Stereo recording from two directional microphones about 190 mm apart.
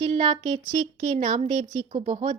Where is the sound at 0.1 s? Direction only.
40° right (ahead or behind).